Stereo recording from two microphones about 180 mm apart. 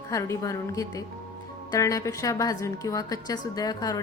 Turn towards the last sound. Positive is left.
turn(degrees=20)  # may be behind; listen again after turning